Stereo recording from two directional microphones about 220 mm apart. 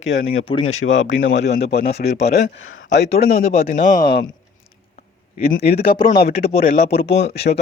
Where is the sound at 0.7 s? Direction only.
60° left (ahead or behind).